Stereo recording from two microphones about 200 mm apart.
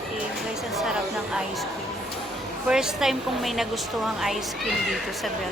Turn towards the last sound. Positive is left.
turn(degrees=0)  # may be behind; listen again after turning